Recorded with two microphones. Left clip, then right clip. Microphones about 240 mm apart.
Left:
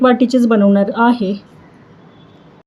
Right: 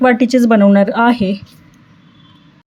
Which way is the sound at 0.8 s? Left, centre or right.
Right.